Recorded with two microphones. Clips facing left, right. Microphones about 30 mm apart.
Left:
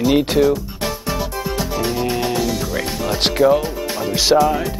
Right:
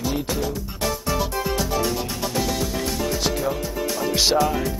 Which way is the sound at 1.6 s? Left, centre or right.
Left.